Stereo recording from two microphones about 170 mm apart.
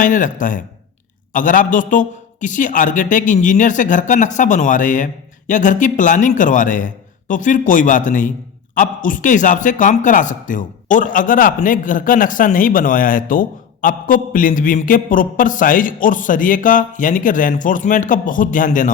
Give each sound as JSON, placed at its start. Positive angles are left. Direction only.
{"t": 0.0, "sound": "speech", "side_deg": 50}